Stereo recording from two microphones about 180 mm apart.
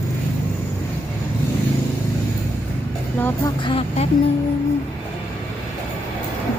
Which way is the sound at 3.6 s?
30° left (ahead or behind).